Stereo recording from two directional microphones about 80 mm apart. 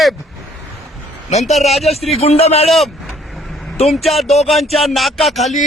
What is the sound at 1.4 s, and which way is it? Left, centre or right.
Speech, centre.